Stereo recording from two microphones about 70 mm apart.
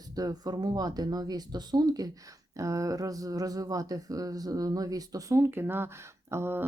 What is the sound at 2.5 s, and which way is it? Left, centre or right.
A woman's voice, right.